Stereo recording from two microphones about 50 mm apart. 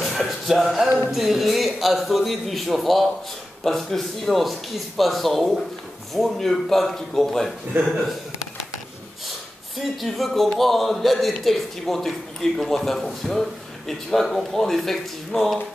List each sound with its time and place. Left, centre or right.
0.0 s music: centre
1.1 s speech: centre
7.7 s speech: right
9.8 s speech: centre